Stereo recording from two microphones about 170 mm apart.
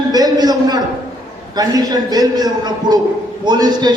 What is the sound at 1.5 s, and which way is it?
A man's voice, 25° right (ahead or behind).